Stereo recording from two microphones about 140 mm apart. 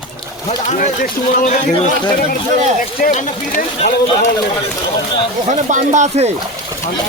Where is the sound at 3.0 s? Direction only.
75° left (ahead or behind).